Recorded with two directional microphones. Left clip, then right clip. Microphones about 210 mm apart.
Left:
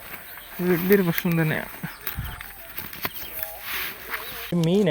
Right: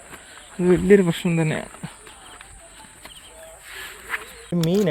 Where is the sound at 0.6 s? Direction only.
30° right (ahead or behind).